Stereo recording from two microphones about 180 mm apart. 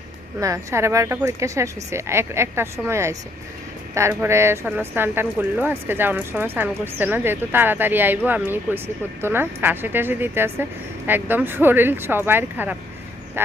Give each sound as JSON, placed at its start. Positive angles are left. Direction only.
{"t": 0.3, "sound": "speech", "side_deg": -15}